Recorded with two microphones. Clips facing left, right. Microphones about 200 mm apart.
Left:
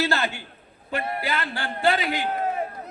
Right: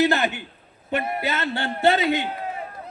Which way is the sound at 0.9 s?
20° right (ahead or behind).